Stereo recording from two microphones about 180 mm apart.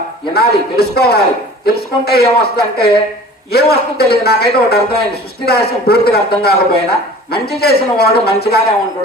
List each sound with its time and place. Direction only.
0.3 s a man's voice: 60° left (ahead or behind)